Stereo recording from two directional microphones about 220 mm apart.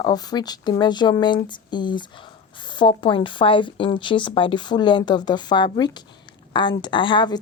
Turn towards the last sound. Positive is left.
turn(degrees=20)  # may be behind; listen again after turning